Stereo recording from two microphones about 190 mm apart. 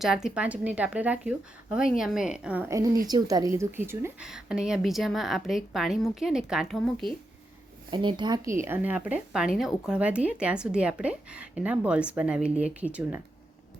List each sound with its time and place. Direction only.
0.0 s a woman's voice: 5° right (ahead or behind)
7.9 s speech: 25° right (ahead or behind)
8.6 s speech: 10° right (ahead or behind)